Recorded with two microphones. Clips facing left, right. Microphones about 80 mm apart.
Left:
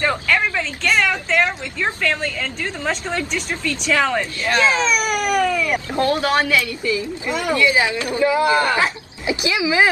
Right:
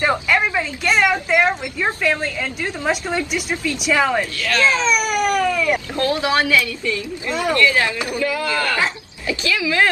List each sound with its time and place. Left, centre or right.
0.0 s a sound: centre
1.3 s a woman's voice: centre
4.5 s speech: left
4.7 s speech: centre
7.2 s speech: centre